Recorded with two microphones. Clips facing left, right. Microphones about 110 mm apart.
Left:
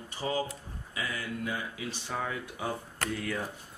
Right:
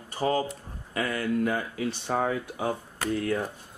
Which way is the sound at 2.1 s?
45° right (ahead or behind).